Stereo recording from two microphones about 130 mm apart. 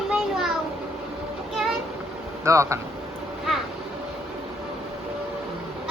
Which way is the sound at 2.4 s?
25° right (ahead or behind).